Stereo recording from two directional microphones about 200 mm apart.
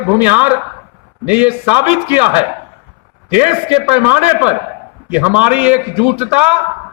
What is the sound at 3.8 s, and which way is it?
A man's voice, 10° right (ahead or behind).